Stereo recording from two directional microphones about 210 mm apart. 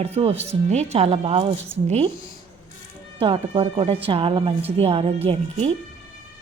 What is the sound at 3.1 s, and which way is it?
Speech, 25° right (ahead or behind).